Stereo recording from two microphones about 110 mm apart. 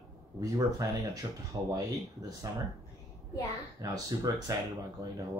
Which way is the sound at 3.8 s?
35° right (ahead or behind).